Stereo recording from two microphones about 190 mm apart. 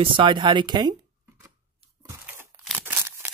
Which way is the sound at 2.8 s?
10° right (ahead or behind).